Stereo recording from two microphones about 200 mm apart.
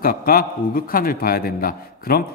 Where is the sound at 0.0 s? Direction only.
50° left (ahead or behind).